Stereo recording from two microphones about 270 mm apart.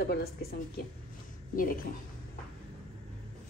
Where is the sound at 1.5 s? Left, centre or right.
Left.